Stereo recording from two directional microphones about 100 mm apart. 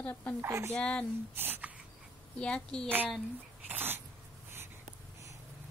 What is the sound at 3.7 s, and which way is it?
Dog, 20° right (ahead or behind).